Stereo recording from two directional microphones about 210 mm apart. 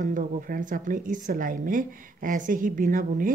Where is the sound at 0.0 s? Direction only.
40° right (ahead or behind).